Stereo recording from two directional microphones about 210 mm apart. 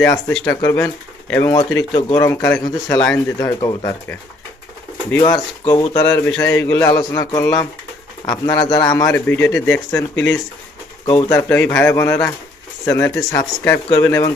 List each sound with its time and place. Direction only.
0.0 s a man's voice: 5° left (ahead or behind)
11.0 s a man's voice: 20° left (ahead or behind)